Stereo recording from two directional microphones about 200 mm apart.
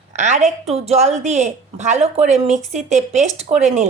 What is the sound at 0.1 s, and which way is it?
Speech, 35° right (ahead or behind).